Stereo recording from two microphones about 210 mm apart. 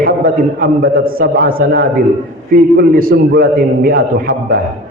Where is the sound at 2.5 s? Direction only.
45° right (ahead or behind).